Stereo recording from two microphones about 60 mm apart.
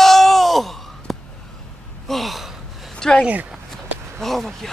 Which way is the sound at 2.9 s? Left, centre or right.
Centre.